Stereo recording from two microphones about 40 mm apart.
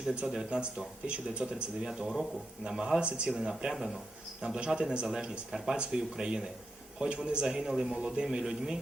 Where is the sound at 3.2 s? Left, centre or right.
Centre.